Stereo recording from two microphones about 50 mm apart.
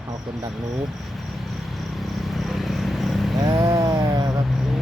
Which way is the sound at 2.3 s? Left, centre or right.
Centre.